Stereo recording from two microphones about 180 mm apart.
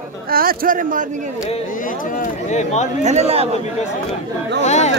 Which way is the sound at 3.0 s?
40° right (ahead or behind).